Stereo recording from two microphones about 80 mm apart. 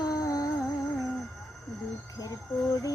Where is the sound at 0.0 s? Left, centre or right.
Left.